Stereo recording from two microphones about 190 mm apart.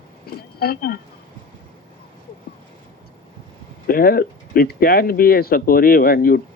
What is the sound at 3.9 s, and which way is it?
Speech, 50° left (ahead or behind).